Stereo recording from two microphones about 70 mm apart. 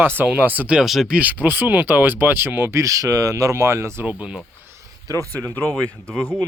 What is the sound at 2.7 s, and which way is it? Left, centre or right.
Speech, right.